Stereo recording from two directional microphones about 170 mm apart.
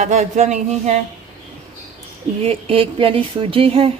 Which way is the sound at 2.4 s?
35° right (ahead or behind).